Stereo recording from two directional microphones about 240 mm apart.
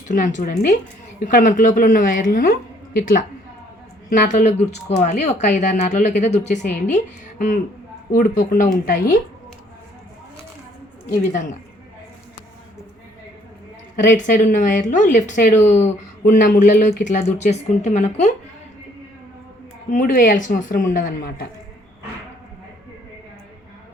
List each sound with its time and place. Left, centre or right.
0.1 s a woman's voice: left
11.2 s a woman's voice: left
13.9 s a woman's voice: left
19.9 s a woman's voice: left